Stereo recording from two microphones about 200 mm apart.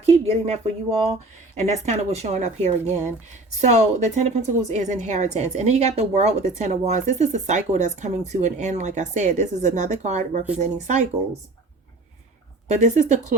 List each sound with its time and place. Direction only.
0.0 s speech: 30° right (ahead or behind)
12.6 s speech: 35° right (ahead or behind)